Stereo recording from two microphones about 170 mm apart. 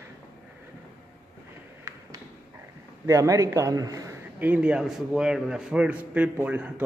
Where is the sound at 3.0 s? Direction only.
20° right (ahead or behind).